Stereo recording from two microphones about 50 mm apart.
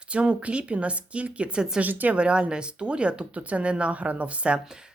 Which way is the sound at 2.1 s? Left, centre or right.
Right.